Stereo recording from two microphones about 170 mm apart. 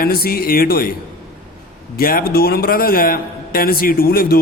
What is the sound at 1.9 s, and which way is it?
A man's voice, 60° left (ahead or behind).